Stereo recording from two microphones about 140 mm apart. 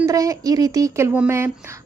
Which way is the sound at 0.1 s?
25° right (ahead or behind).